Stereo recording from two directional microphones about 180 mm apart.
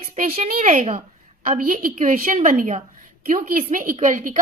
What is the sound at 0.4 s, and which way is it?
A woman's voice, 45° right (ahead or behind).